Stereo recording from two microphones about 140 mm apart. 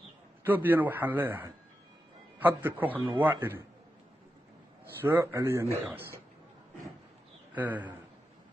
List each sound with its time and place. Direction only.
0.4 s a man's voice: 15° right (ahead or behind)
5.0 s a man's voice: 15° right (ahead or behind)
7.5 s a man's voice: 10° right (ahead or behind)